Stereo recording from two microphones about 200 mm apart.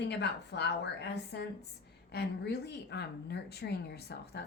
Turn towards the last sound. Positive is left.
turn(degrees=55)  # may be behind; listen again after turning